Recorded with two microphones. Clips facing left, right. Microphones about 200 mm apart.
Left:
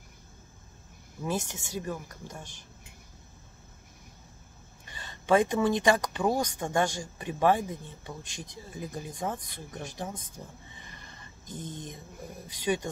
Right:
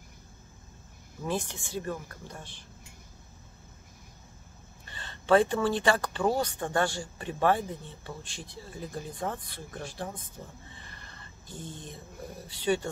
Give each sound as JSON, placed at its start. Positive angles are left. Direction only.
{"t": 1.2, "sound": "speech", "side_deg": 15}
{"t": 4.8, "sound": "speech", "side_deg": 15}
{"t": 10.7, "sound": "a sound", "side_deg": 15}
{"t": 12.4, "sound": "speech", "side_deg": 15}